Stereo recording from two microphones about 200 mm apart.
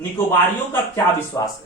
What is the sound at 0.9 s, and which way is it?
Speech, 15° left (ahead or behind).